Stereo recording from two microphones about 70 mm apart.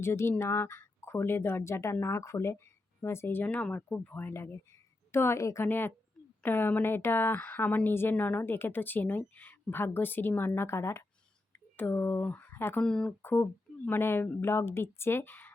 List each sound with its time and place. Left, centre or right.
0.0 s speech: left
5.6 s speech: left
8.4 s speech: left
12.8 s speech: centre
13.2 s speech: left